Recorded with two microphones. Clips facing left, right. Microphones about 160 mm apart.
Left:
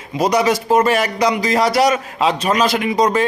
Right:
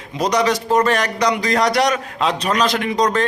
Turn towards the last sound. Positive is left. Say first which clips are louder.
# left 2 dB
turn(degrees=5)  # may be behind; listen again after turning